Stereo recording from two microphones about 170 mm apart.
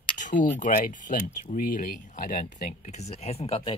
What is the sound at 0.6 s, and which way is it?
Speech, 50° left (ahead or behind).